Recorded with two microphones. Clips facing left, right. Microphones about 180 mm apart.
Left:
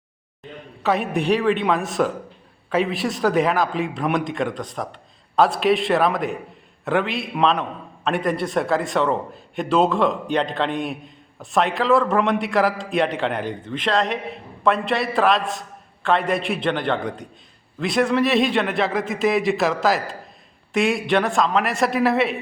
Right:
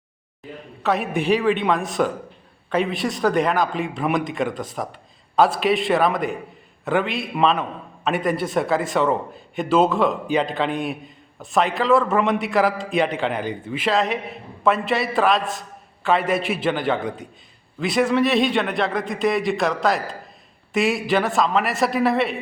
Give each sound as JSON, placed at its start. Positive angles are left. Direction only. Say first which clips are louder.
{"t": 0.8, "sound": "a man's voice", "louder": "left 1 dB", "side_deg": 0}